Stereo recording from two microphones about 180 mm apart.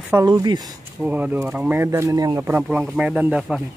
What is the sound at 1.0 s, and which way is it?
Speech, 10° right (ahead or behind).